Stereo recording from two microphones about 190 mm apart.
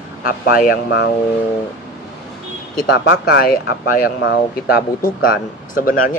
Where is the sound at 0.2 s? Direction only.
50° left (ahead or behind).